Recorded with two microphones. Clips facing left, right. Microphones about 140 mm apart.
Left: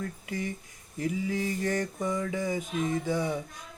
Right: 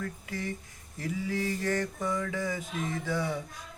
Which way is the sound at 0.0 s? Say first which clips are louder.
Left 2 dB; 20° left (ahead or behind).